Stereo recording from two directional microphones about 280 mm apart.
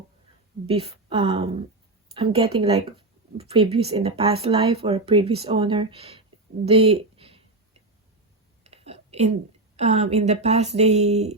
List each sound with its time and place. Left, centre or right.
0.7 s speech: centre
6.7 s a sound: right
8.6 s whispering: right
9.7 s speech: right